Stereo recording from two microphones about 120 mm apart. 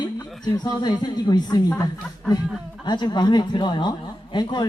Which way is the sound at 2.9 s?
40° left (ahead or behind).